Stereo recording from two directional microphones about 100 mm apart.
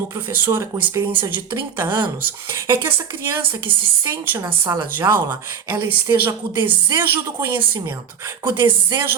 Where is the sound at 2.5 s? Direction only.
25° right (ahead or behind).